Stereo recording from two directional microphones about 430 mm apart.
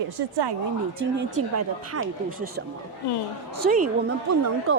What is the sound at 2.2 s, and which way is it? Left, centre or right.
Speech, right.